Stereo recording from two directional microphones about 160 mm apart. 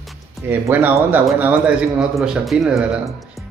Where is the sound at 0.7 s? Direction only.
10° right (ahead or behind).